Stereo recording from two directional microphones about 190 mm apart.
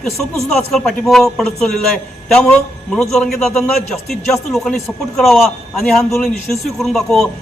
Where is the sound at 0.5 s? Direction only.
Centre (ahead or behind).